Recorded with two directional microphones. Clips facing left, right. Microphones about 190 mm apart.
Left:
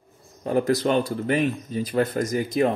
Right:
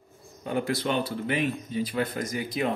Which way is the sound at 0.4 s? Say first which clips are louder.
Left 7 dB; 40° left (ahead or behind).